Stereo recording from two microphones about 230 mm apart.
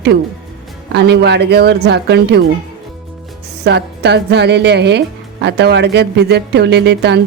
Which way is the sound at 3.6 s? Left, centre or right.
Right.